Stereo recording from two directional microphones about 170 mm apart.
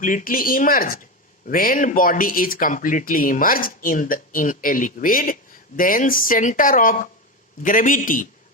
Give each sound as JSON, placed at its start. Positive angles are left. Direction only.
{"t": 0.0, "sound": "speech", "side_deg": 50}